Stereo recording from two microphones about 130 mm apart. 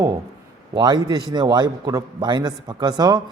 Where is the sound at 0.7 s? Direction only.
35° right (ahead or behind).